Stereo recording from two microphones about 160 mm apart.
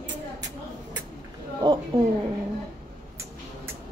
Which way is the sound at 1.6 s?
25° right (ahead or behind).